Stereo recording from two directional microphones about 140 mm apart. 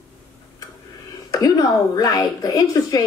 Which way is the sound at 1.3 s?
25° left (ahead or behind).